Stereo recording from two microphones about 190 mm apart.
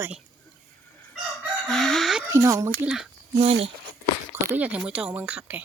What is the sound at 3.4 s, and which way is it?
Speech, 35° right (ahead or behind).